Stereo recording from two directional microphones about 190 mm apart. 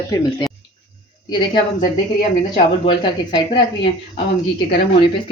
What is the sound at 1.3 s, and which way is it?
Speech, 25° left (ahead or behind).